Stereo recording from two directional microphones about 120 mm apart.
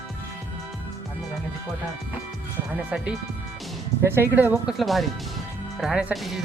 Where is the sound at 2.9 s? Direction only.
10° right (ahead or behind).